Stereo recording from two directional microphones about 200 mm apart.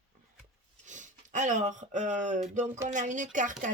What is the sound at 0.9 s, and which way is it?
Speech, 40° right (ahead or behind).